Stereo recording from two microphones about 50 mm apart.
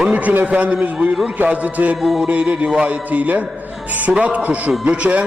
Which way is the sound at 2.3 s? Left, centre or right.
Right.